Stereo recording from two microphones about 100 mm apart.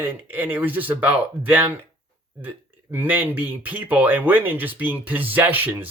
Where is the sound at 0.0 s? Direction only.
20° right (ahead or behind).